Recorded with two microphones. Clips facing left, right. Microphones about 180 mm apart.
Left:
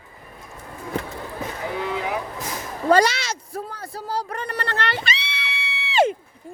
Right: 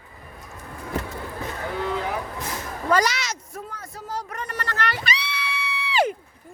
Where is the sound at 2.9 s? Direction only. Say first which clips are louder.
Left 4 dB; 30° left (ahead or behind).